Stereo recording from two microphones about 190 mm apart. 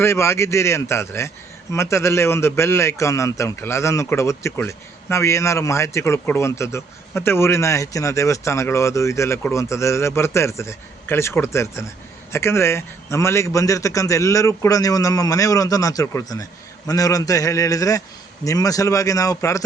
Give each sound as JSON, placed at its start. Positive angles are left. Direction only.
{"t": 0.0, "sound": "a man's voice", "side_deg": 15}